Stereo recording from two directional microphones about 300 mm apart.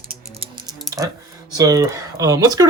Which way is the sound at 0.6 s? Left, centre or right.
Centre.